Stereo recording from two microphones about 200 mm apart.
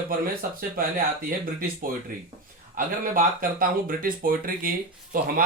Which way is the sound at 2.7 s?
45° right (ahead or behind).